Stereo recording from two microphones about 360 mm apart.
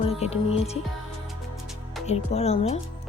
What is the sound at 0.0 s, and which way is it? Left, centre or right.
Music, centre.